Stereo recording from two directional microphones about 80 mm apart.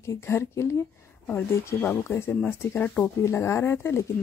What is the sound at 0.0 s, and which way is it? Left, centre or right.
Speech, left.